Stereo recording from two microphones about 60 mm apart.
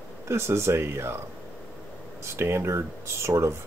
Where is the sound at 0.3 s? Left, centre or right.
Right.